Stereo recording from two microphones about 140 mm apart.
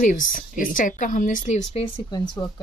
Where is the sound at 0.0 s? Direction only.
70° left (ahead or behind); by 1.9 s 50° left (ahead or behind).